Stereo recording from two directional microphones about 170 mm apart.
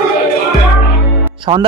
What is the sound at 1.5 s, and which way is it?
Speech, 30° right (ahead or behind).